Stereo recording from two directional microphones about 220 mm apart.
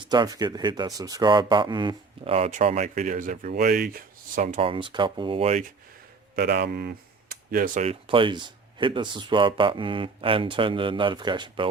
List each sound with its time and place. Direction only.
0.0 s speech: 20° right (ahead or behind)
6.3 s speech: 45° right (ahead or behind); by 11.7 s 20° right (ahead or behind)